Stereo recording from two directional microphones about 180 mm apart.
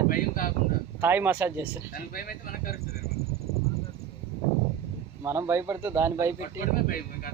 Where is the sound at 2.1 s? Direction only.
55° left (ahead or behind).